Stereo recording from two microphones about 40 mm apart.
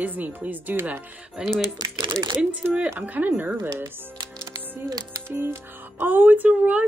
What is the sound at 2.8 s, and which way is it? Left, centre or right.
Speech, right.